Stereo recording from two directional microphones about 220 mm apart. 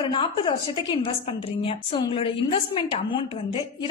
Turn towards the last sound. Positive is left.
turn(degrees=20)  # may be behind; listen again after turning